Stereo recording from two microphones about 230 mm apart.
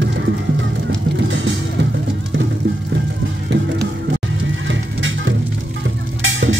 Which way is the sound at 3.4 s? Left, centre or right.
Right.